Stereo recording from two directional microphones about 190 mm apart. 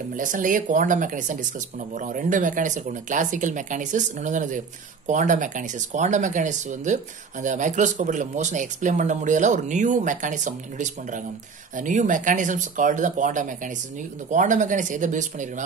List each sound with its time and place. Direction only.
0.2 s speech: 45° right (ahead or behind)